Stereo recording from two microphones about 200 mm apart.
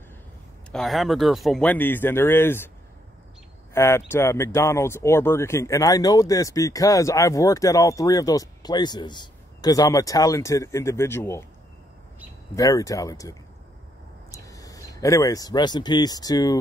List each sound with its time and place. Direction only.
0.7 s speech: centre (ahead or behind)
3.7 s speech: 15° left (ahead or behind)
12.5 s speech: 15° left (ahead or behind)